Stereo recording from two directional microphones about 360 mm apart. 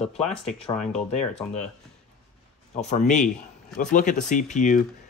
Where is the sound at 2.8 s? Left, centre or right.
Centre.